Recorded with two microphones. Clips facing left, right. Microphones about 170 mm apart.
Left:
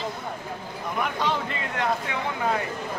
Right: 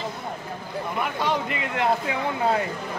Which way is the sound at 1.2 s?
15° right (ahead or behind).